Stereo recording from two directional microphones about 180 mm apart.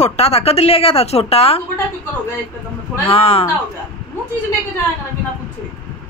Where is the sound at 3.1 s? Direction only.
30° left (ahead or behind).